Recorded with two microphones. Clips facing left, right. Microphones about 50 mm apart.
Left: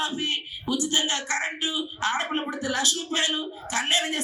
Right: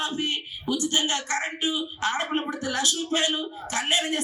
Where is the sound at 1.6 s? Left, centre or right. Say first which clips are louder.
Right 1 dB; centre.